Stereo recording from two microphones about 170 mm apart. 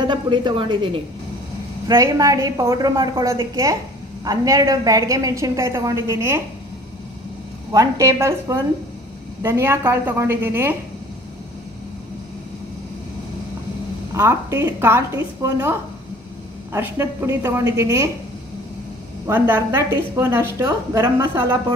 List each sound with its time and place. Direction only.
0.0 s a woman's voice: 25° right (ahead or behind)
7.7 s a woman's voice: 20° right (ahead or behind)
14.1 s a woman's voice: 15° right (ahead or behind)
16.7 s a woman's voice: 15° right (ahead or behind)
19.2 s a woman's voice: 10° right (ahead or behind)